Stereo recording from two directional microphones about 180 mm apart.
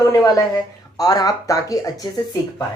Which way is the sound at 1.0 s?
20° left (ahead or behind).